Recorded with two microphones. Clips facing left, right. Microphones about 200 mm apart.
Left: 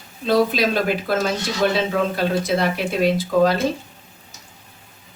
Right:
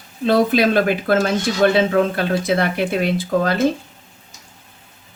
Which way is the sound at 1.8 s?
55° right (ahead or behind).